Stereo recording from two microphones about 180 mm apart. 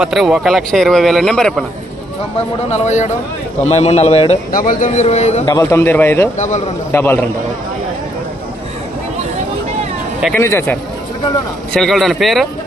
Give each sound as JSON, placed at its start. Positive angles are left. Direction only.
{"t": 0.0, "sound": "speech", "side_deg": -5}
{"t": 2.7, "sound": "a man's voice", "side_deg": 40}
{"t": 4.5, "sound": "a man's voice", "side_deg": 50}
{"t": 5.4, "sound": "a man's voice", "side_deg": 20}
{"t": 6.3, "sound": "a man's voice", "side_deg": 40}
{"t": 6.9, "sound": "a man's voice", "side_deg": 10}
{"t": 10.3, "sound": "a man's voice", "side_deg": 10}